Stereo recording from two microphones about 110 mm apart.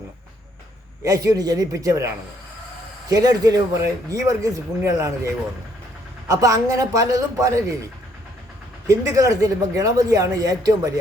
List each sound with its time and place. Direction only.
1.0 s speech: 35° right (ahead or behind)
8.9 s speech: 30° right (ahead or behind)